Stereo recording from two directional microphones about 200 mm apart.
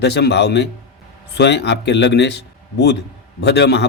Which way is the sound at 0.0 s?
55° left (ahead or behind).